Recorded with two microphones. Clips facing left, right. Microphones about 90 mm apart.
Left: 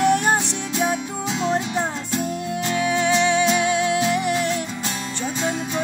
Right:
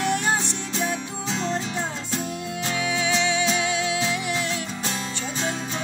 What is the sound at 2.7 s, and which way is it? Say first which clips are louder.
Music: left 5 dB; 45° left (ahead or behind).